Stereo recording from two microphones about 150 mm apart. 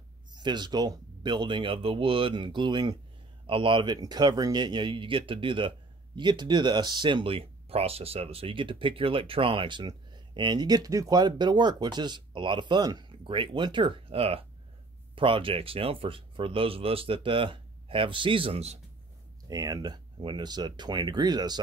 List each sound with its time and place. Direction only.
0.3 s speech: 30° right (ahead or behind)
19.4 s speech: 25° right (ahead or behind)